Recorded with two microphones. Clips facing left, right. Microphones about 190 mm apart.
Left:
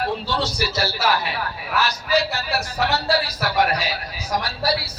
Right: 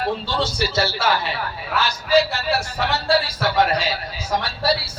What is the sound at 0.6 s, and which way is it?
A man's voice, 25° right (ahead or behind).